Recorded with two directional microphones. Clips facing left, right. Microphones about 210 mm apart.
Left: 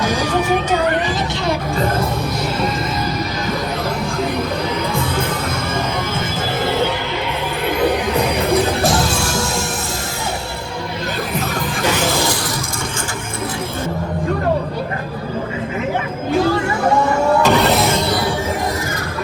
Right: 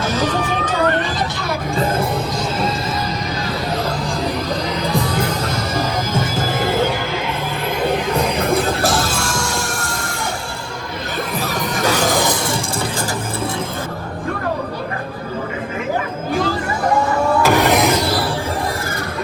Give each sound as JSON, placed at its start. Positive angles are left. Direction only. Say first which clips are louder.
{"t": 0.0, "sound": "crowd", "louder": "left 1 dB", "side_deg": 10}
{"t": 12.0, "sound": "a sound", "louder": "right 1 dB", "side_deg": -15}
{"t": 17.4, "sound": "music", "louder": "even", "side_deg": -10}